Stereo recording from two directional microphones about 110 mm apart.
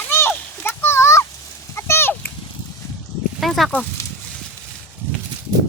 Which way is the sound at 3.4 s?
Centre (ahead or behind).